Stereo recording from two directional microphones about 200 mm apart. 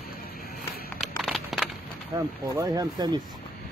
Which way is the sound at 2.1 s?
15° right (ahead or behind).